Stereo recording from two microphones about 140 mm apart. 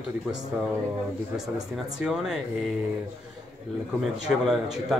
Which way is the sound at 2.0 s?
5° right (ahead or behind).